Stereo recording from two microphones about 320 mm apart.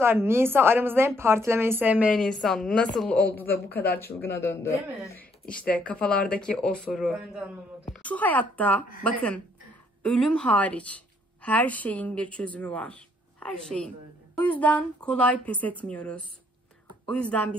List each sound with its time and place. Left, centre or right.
0.0 s a woman's voice: centre